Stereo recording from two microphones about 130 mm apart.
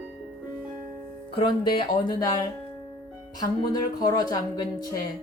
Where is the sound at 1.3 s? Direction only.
40° left (ahead or behind).